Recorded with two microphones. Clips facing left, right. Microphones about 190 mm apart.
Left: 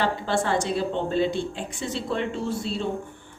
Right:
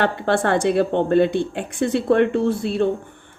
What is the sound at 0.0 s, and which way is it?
Speech, 60° right (ahead or behind).